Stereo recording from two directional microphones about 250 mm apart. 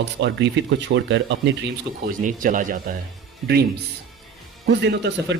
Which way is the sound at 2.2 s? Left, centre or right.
Right.